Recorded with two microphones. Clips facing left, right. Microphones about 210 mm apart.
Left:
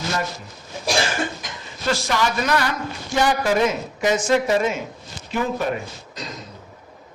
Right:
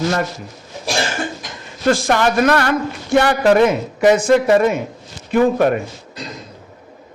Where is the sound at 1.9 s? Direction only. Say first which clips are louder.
Right 7 dB; 50° right (ahead or behind).